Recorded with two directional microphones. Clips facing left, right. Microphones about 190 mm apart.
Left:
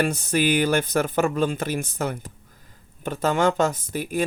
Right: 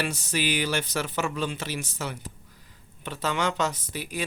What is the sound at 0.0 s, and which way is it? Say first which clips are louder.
Speech: left 7 dB; 55° left (ahead or behind).